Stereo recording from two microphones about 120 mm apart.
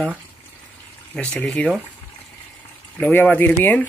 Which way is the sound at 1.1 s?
10° left (ahead or behind).